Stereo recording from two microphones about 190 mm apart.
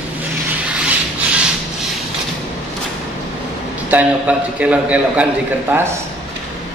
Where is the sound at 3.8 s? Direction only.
5° right (ahead or behind).